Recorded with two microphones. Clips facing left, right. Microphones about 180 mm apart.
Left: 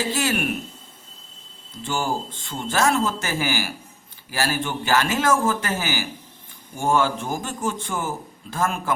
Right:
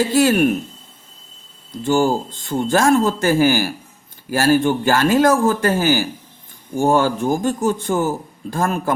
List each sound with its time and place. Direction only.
0.1 s a man's voice: 45° right (ahead or behind)
1.7 s a man's voice: 45° right (ahead or behind)